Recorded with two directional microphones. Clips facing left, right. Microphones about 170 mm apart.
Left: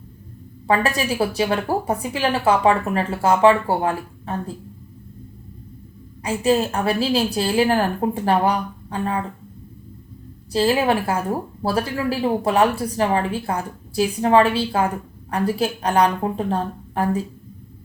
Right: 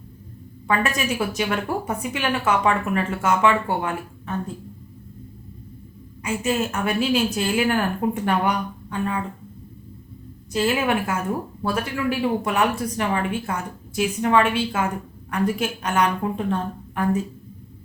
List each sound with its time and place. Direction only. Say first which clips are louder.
0.7 s speech: left 3 dB; 35° left (ahead or behind)
6.2 s speech: left 5 dB; 35° left (ahead or behind)
10.5 s speech: left 3 dB; 35° left (ahead or behind)